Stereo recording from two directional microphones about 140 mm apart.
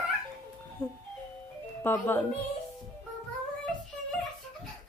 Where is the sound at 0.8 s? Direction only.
15° left (ahead or behind).